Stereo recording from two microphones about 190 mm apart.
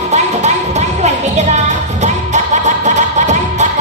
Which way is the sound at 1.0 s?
35° right (ahead or behind).